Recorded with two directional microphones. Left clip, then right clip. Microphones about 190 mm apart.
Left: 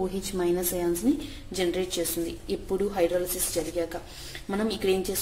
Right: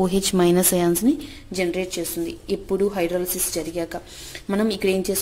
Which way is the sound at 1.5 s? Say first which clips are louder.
Right 3 dB; 25° right (ahead or behind).